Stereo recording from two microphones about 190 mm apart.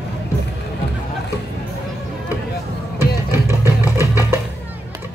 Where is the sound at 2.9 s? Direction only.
15° right (ahead or behind).